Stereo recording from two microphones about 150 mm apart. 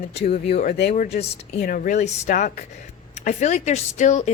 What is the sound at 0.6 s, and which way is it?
Speech, 65° left (ahead or behind).